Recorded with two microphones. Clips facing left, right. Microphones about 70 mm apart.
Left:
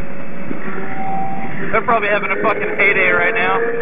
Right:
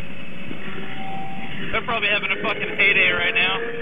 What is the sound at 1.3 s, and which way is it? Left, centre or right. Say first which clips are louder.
A man's voice: left 9 dB; left.